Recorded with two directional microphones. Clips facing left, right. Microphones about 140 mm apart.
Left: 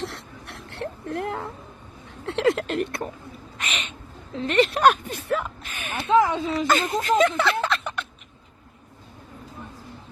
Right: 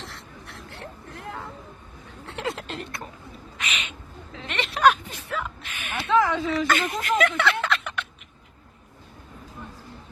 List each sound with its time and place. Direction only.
0.0 s a sound: 70° left (ahead or behind)
2.2 s speech: 75° left (ahead or behind); by 3.0 s 55° left (ahead or behind)
3.6 s speech: 40° left (ahead or behind)
5.8 s speech: 35° left (ahead or behind)
6.1 s speech: 20° left (ahead or behind)